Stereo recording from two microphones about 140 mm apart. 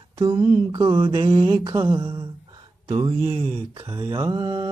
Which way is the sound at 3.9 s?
30° right (ahead or behind).